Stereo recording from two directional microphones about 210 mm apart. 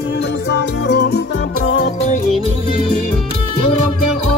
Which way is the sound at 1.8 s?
35° left (ahead or behind).